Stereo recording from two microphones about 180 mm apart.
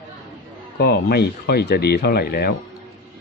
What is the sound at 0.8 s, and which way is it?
Speech, 60° left (ahead or behind).